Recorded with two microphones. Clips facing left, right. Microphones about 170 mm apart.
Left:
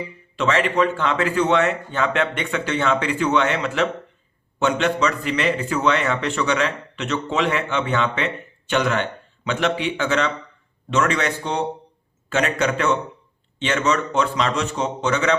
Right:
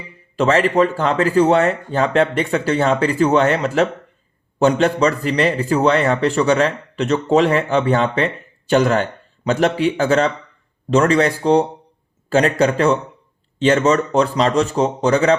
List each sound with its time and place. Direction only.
0.3 s a man's voice: 40° right (ahead or behind)